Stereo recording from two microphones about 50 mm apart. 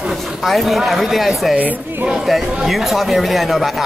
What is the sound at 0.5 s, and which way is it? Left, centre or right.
Speech, centre.